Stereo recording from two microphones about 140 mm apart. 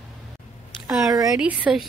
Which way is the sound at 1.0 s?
25° right (ahead or behind).